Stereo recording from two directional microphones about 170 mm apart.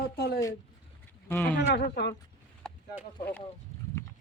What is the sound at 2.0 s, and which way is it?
Speech, 75° left (ahead or behind).